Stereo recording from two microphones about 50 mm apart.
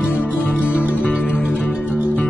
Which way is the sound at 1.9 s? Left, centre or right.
Right.